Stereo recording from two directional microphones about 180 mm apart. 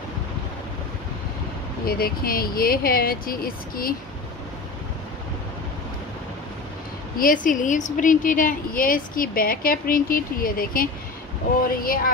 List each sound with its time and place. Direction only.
1.9 s speech: 55° left (ahead or behind)
7.2 s a woman's voice: 50° left (ahead or behind)